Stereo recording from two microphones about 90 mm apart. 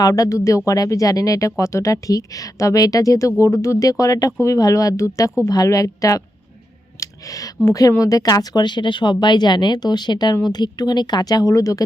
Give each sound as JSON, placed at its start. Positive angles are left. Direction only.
{"t": 0.0, "sound": "speech", "side_deg": 40}
{"t": 7.0, "sound": "a sound", "side_deg": 40}
{"t": 7.7, "sound": "speech", "side_deg": 40}